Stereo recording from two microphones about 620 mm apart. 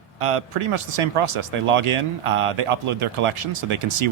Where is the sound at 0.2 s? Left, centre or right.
Right.